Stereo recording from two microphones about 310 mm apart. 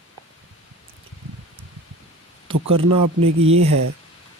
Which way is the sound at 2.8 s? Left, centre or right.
Right.